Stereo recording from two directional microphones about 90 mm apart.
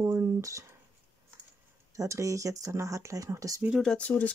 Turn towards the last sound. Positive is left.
turn(degrees=10)  # may be behind; listen again after turning